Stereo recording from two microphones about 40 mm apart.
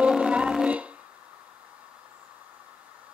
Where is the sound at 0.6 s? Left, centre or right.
Right.